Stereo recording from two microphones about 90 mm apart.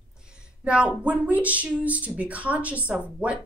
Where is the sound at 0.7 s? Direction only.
10° right (ahead or behind).